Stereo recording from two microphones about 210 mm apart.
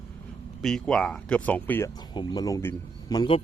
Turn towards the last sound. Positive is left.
turn(degrees=20)  # may be behind; listen again after turning